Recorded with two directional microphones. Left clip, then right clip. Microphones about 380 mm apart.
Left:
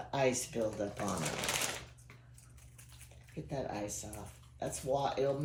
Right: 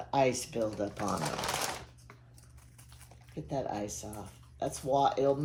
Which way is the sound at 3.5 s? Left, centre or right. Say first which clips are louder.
Right 4 dB; centre.